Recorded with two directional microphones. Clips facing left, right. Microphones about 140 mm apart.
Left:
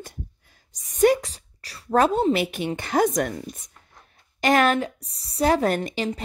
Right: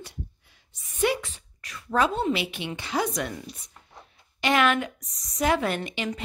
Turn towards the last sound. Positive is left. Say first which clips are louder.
# left 5 dB
turn(degrees=40)  # may be behind; listen again after turning